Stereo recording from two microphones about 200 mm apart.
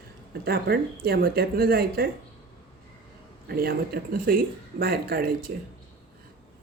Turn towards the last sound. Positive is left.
turn(degrees=-50)  # may be behind; listen again after turning